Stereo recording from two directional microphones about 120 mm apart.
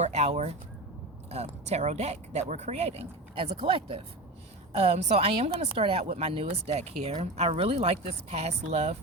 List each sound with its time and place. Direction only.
0.0 s a sound: 70° right (ahead or behind)
1.3 s speech: 65° right (ahead or behind); by 4.0 s 45° right (ahead or behind)
4.7 s speech: 65° right (ahead or behind)